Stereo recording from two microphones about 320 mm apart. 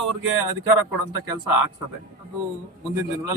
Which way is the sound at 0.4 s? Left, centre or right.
Right.